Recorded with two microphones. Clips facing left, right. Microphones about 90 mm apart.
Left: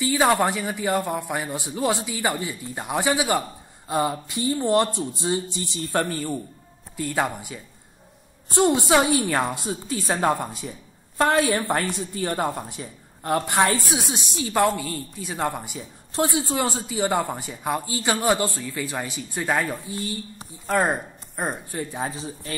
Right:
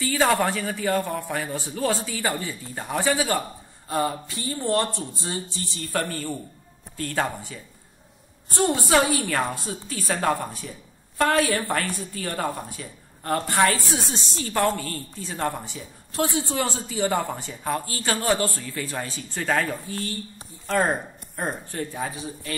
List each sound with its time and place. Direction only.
0.0 s a woman's voice: 15° left (ahead or behind)